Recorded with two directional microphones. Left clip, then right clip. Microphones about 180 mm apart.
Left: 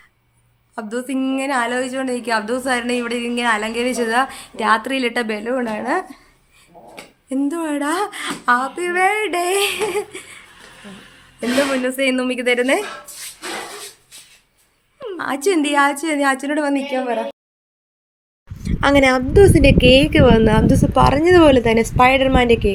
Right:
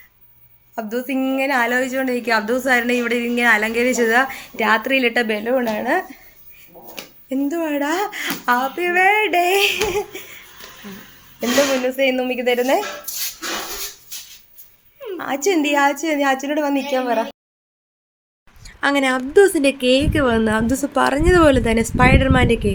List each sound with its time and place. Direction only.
0.8 s a woman's voice: 10° left (ahead or behind)
7.3 s speech: 10° left (ahead or behind)
11.3 s speech: 15° left (ahead or behind)
15.0 s speech: 20° left (ahead or behind)
18.6 s a woman's voice: 10° left (ahead or behind)